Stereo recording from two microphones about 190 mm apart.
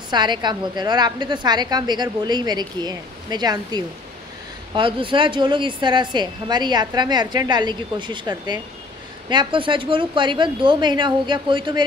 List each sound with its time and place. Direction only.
0.1 s a woman's voice: 25° right (ahead or behind)